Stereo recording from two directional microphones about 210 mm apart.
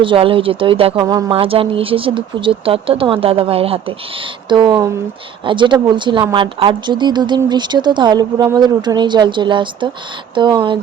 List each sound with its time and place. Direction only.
0.0 s speech: 25° right (ahead or behind)